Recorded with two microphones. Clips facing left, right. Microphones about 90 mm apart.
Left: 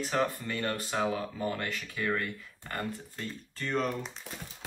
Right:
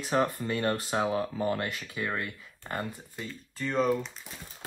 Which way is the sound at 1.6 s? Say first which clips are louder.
Right 1 dB; 15° right (ahead or behind).